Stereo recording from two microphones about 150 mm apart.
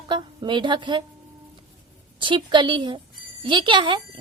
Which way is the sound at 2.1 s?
30° right (ahead or behind).